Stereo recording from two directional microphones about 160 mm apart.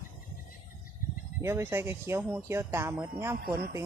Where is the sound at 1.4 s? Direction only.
15° right (ahead or behind).